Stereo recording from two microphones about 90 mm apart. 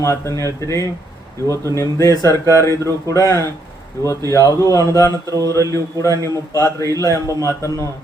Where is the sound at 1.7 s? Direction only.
35° left (ahead or behind).